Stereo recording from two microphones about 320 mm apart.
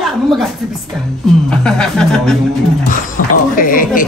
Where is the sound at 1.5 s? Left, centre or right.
Centre.